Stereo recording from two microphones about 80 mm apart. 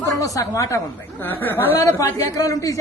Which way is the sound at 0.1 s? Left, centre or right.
Left.